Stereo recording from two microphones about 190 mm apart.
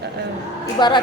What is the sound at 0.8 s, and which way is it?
Speech, 25° left (ahead or behind).